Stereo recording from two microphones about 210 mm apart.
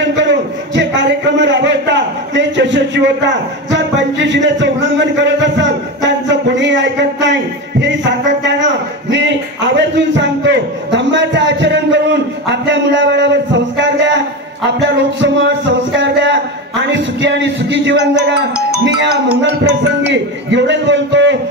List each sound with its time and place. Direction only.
0.0 s a sound: 60° right (ahead or behind)
4.3 s a man's voice: 60° right (ahead or behind)
20.1 s a man's voice: 55° right (ahead or behind)